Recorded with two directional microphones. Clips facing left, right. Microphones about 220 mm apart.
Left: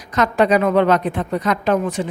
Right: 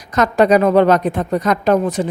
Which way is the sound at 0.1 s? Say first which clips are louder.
Right 3 dB; 40° right (ahead or behind).